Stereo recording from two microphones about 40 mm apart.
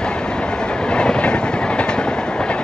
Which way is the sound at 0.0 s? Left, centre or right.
Left.